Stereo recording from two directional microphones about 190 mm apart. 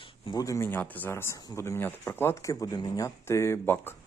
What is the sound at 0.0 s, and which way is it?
Speech, 20° left (ahead or behind).